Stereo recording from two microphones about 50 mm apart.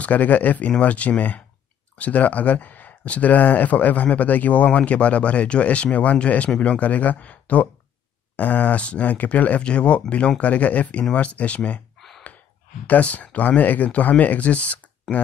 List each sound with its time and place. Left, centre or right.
0.0 s speech: left
12.8 s speech: left